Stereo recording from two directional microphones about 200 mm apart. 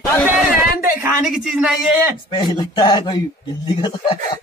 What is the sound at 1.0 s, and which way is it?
Speech, 5° right (ahead or behind).